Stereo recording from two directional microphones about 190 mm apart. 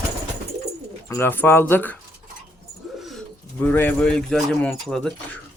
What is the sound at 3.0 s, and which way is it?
Speech, centre (ahead or behind).